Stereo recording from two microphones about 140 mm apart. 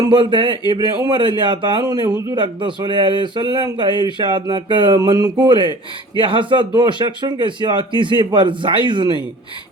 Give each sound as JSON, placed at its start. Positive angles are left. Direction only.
{"t": 0.0, "sound": "speech", "side_deg": -35}
{"t": 4.9, "sound": "a sound", "side_deg": -30}
{"t": 6.1, "sound": "speech", "side_deg": -35}